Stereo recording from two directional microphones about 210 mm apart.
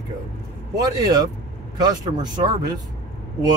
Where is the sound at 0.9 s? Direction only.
15° right (ahead or behind).